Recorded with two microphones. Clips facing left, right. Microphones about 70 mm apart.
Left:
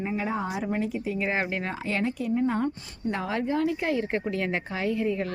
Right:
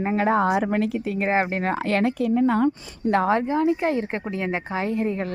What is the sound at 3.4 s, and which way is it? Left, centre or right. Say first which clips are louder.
Speech: right 5 dB; right.